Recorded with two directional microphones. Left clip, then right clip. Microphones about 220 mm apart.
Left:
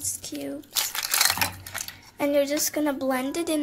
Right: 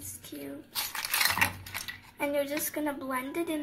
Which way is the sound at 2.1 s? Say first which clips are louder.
Left 7 dB; 50° left (ahead or behind).